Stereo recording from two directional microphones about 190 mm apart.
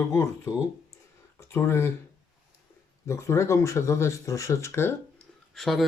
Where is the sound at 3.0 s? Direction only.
15° left (ahead or behind).